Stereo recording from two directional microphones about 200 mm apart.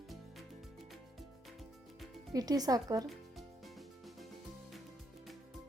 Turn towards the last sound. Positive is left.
turn(degrees=0)  # may be behind; listen again after turning